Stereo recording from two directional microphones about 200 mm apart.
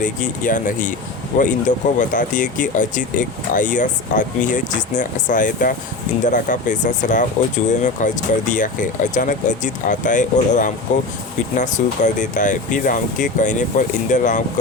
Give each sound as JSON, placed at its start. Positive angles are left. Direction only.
{"t": 0.0, "sound": "speech", "side_deg": 40}